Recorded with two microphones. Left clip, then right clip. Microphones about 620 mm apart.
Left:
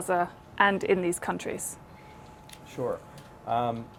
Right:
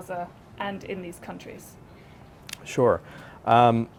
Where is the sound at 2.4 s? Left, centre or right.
Right.